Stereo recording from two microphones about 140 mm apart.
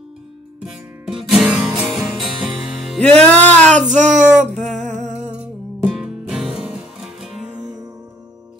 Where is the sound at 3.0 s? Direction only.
10° left (ahead or behind).